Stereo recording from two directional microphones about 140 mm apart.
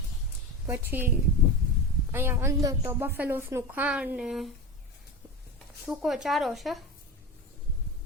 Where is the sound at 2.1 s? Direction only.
15° right (ahead or behind).